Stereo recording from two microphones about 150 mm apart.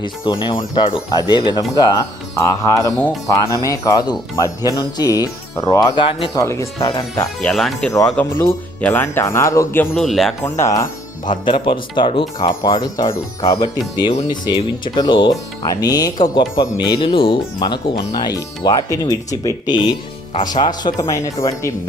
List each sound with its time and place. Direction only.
0.0 s speech: 30° left (ahead or behind)
6.0 s speech: 35° left (ahead or behind)
6.3 s speech: 20° left (ahead or behind)
6.7 s speech: 35° left (ahead or behind)
7.4 s speech: centre (ahead or behind); by 9.9 s 20° left (ahead or behind)
9.9 s speech: centre (ahead or behind)
10.4 s speech: 20° left (ahead or behind)
11.4 s speech: 35° left (ahead or behind)